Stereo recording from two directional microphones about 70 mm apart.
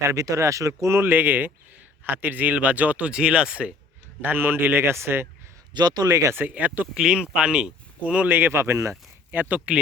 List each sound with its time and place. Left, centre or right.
0.0 s speech: right
0.8 s speech: right; by 3.8 s centre
4.2 s a man's voice: right
5.7 s speech: right
6.5 s speech: right
8.3 s a man's voice: right
9.3 s speech: right